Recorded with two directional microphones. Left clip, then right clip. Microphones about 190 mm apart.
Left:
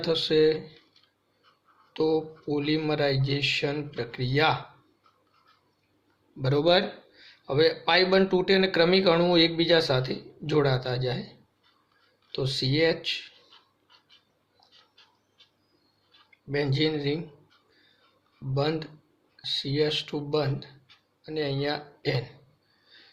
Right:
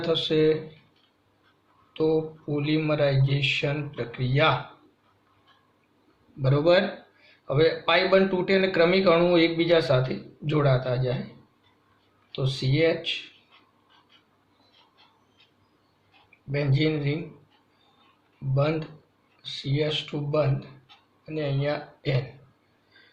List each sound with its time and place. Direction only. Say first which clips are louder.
0.0 s speech: even; 55° left (ahead or behind)
1.9 s speech: right 1 dB; 60° left (ahead or behind)
6.4 s speech: right 2 dB; 50° left (ahead or behind)
12.3 s speech: left 2 dB; 55° left (ahead or behind)
16.5 s speech: even; 55° left (ahead or behind)
19.5 s speech: left 2 dB; 55° left (ahead or behind)